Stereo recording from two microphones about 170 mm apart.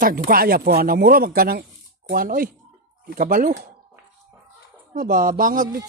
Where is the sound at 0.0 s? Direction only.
55° right (ahead or behind).